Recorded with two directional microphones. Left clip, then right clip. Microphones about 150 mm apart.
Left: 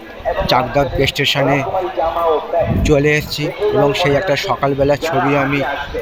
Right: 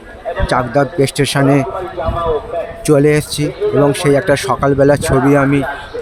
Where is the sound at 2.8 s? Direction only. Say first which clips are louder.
Right 6 dB; 40° right (ahead or behind).